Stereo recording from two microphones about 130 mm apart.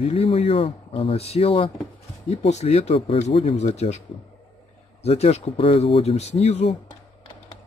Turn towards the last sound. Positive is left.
turn(degrees=55)  # may be behind; listen again after turning